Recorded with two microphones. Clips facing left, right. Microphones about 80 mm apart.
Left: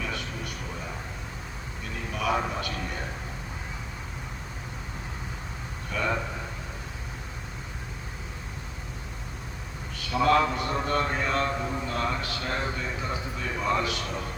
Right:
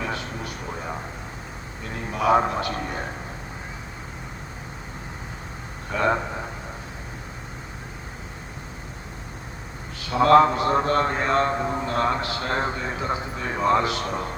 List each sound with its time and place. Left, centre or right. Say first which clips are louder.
0.0 s vehicle: right 4 dB; right
2.1 s a man's voice: right 8 dB; right
10.2 s a man's voice: right 7 dB; right